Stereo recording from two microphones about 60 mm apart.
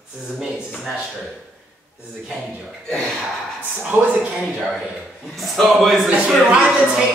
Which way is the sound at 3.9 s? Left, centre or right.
Right.